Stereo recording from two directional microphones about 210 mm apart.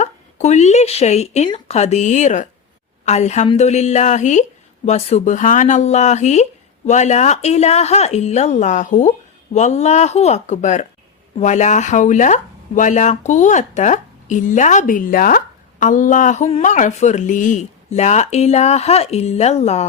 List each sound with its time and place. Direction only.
0.0 s speech: 35° left (ahead or behind)